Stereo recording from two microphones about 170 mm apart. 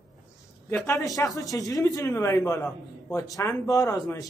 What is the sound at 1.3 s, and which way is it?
Speech, 20° left (ahead or behind).